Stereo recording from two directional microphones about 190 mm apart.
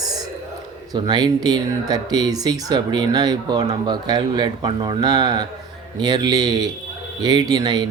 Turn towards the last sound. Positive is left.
turn(degrees=-20)  # may be behind; listen again after turning